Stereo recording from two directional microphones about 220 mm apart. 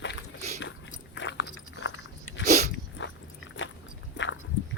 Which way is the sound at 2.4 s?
30° right (ahead or behind).